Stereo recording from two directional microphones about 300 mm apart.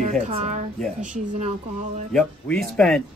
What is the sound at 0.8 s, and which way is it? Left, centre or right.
Speech, centre.